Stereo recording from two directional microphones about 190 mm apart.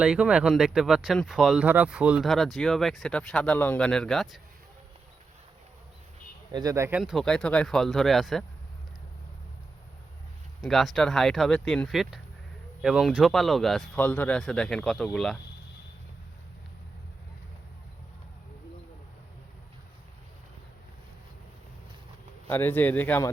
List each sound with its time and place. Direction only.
0.0 s speech: 5° right (ahead or behind)
6.5 s speech: 20° right (ahead or behind)
7.0 s speech: centre (ahead or behind)
10.6 s speech: centre (ahead or behind)
22.4 s speech: 10° left (ahead or behind)